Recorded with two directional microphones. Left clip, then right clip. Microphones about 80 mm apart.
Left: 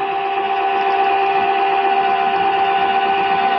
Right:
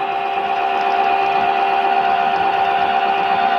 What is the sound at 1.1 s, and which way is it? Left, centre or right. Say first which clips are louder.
Sewing machine: even; right.